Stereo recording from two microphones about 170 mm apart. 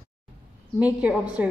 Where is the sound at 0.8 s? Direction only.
10° right (ahead or behind).